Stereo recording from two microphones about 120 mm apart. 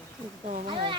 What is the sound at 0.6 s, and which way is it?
Speech, 45° right (ahead or behind).